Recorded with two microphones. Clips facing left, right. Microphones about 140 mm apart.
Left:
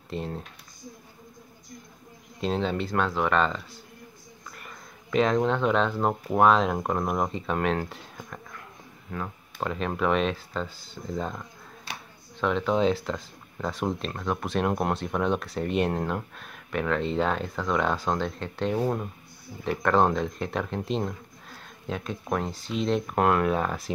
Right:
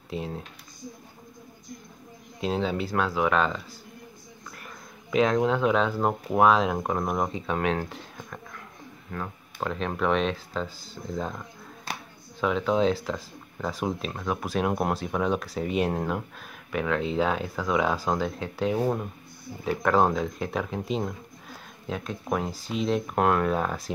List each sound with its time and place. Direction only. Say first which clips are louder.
0.1 s speech: even; centre (ahead or behind)
2.4 s speech: even; 5° right (ahead or behind)
11.9 s a sound: right 4 dB; 45° right (ahead or behind)
12.4 s speech: even; centre (ahead or behind)